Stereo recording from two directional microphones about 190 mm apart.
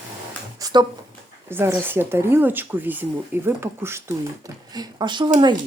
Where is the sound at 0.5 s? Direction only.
20° right (ahead or behind).